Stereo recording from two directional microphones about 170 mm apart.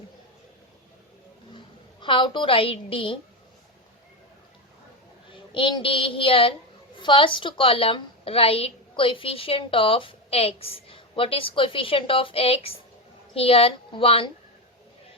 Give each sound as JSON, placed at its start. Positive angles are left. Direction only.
{"t": 2.0, "sound": "a woman's voice", "side_deg": 30}
{"t": 5.3, "sound": "a child's voice", "side_deg": 30}